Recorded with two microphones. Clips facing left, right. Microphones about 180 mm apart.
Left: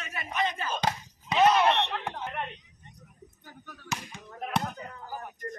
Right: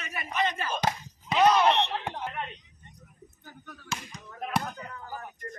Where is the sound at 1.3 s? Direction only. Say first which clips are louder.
Even; 5° left (ahead or behind).